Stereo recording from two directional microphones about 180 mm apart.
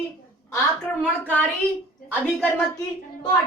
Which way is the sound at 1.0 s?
5° left (ahead or behind).